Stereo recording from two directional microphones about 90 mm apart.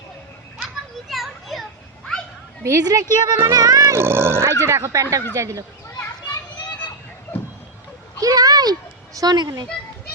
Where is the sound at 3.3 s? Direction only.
30° right (ahead or behind).